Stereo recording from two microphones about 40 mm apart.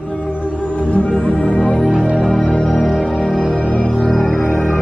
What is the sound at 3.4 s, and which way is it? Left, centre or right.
Music, right.